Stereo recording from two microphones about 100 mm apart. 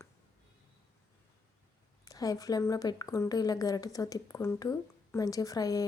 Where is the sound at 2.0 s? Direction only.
35° left (ahead or behind).